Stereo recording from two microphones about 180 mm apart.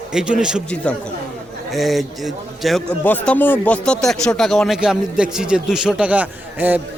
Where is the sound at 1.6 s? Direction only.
Centre (ahead or behind).